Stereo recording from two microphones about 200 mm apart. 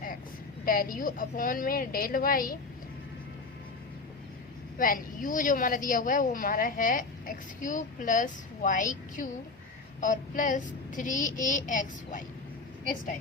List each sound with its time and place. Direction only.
0.6 s a woman's voice: 45° left (ahead or behind)
4.8 s a woman's voice: 45° left (ahead or behind)
10.0 s child singing: 40° left (ahead or behind)